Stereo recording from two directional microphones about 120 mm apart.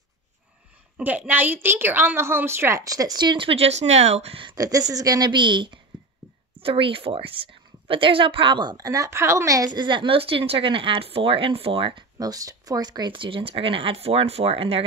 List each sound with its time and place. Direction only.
0.9 s a woman's voice: 15° right (ahead or behind); by 4.6 s 50° right (ahead or behind)
4.6 s a woman's voice: 30° right (ahead or behind); by 12.0 s 50° right (ahead or behind)
12.2 s a woman's voice: 30° right (ahead or behind); by 14.8 s 55° right (ahead or behind)